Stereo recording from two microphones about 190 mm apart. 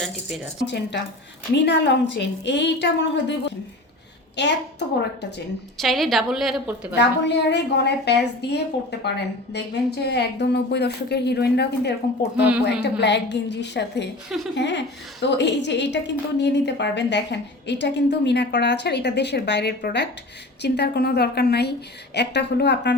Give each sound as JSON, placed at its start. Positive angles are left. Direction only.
{"t": 0.0, "sound": "a woman's voice", "side_deg": 0}
{"t": 0.7, "sound": "a woman's voice", "side_deg": 65}
{"t": 4.4, "sound": "a woman's voice", "side_deg": 65}
{"t": 5.7, "sound": "a woman's voice", "side_deg": 0}
{"t": 6.9, "sound": "a woman's voice", "side_deg": 65}
{"t": 14.3, "sound": "a woman's voice", "side_deg": 0}
{"t": 14.5, "sound": "a woman's voice", "side_deg": 65}